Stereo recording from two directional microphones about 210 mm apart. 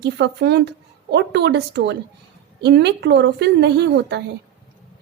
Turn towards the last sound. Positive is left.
turn(degrees=-55)  # may be behind; listen again after turning